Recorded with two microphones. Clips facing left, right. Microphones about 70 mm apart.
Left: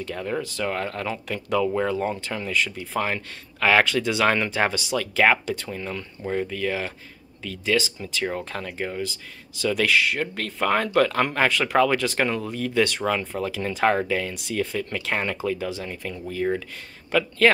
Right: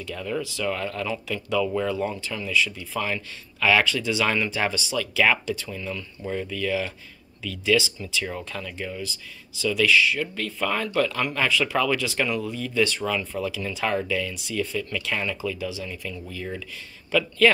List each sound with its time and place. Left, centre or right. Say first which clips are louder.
0.0 s speech: left 1 dB; left
2.6 s speech: left 2 dB; left
8.5 s speech: left 3 dB; left
9.6 s speech: right 1 dB; left
11.8 s speech: left 3 dB; left
14.3 s speech: left 1 dB; left